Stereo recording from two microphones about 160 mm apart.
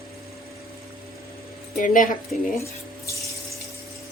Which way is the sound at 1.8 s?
55° left (ahead or behind).